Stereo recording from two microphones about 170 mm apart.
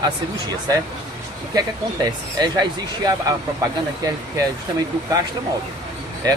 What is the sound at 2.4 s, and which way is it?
Speech, 25° right (ahead or behind).